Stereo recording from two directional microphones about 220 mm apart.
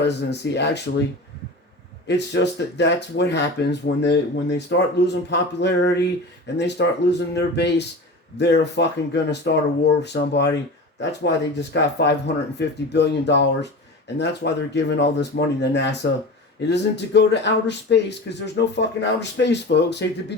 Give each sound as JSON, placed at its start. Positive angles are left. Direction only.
{"t": 0.0, "sound": "speech", "side_deg": 50}
{"t": 2.0, "sound": "speech", "side_deg": 50}
{"t": 11.7, "sound": "speech", "side_deg": 50}